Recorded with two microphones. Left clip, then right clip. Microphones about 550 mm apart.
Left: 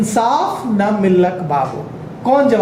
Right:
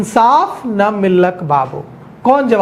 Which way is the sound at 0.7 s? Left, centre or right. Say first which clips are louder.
Right 3 dB; right.